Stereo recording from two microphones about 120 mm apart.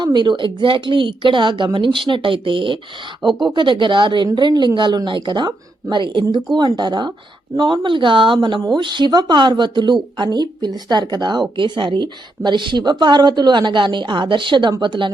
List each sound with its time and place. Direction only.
0.0 s speech: 40° right (ahead or behind)